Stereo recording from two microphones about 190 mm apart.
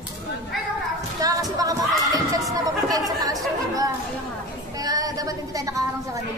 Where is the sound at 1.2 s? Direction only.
20° right (ahead or behind).